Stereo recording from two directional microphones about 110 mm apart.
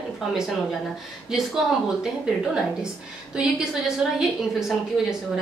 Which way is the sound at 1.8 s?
5° right (ahead or behind).